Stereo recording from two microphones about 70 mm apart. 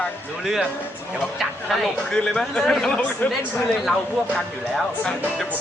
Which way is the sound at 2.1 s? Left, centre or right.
Centre.